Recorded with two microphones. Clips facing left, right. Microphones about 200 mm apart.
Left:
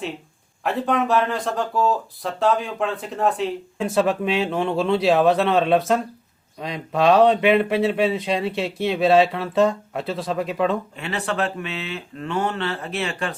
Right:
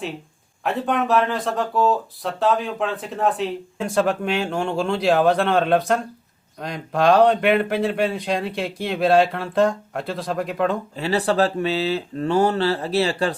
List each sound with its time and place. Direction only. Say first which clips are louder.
0.6 s speech: even; centre (ahead or behind)
10.9 s speech: right 6 dB; 35° right (ahead or behind)